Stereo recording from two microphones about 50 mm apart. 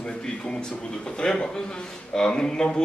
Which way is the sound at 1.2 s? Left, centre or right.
Centre.